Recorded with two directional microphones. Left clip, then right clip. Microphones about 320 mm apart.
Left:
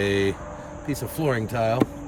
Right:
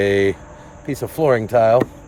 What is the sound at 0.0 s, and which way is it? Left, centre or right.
Speech, right.